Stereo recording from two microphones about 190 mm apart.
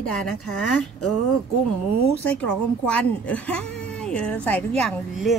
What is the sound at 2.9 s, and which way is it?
A woman's voice, 5° left (ahead or behind).